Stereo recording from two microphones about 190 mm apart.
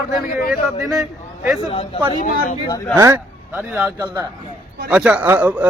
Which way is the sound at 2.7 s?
15° left (ahead or behind).